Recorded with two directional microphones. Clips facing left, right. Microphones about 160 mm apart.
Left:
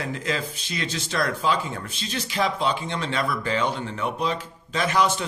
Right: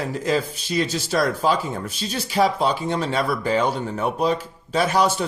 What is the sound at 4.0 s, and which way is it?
Speech, 45° right (ahead or behind).